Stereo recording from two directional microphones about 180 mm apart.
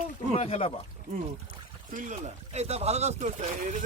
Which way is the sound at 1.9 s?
45° right (ahead or behind).